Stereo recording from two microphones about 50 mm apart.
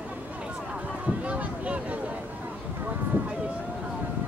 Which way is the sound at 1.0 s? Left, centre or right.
Right.